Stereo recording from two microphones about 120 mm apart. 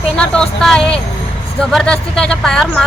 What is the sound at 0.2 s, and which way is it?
Speech, 5° left (ahead or behind).